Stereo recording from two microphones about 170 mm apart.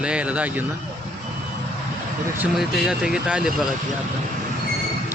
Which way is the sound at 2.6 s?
Centre (ahead or behind).